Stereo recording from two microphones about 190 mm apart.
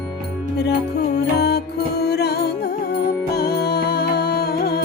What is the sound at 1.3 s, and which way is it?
Music, 60° left (ahead or behind).